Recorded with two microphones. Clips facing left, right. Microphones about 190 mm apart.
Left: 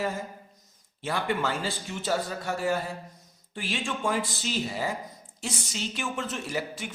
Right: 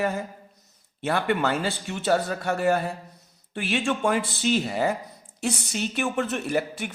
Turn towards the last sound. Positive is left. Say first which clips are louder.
# right 6 dB
turn(degrees=-60)  # may be behind; listen again after turning